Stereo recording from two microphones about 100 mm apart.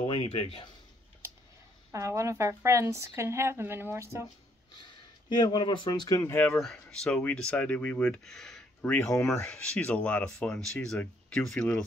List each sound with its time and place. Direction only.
0.0 s speech: 65° left (ahead or behind)
1.9 s speech: 30° right (ahead or behind)
4.7 s speech: 50° left (ahead or behind)
6.3 s speech: 10° left (ahead or behind)